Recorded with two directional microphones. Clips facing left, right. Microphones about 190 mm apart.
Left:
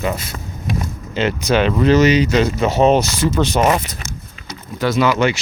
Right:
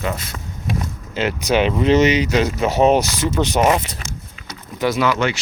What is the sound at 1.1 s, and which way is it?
Speech, 10° right (ahead or behind).